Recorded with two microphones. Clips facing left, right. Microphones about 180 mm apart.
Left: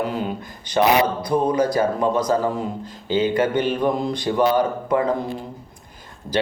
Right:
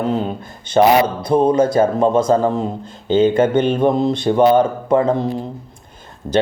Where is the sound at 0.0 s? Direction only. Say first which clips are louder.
Right 5 dB; 25° right (ahead or behind).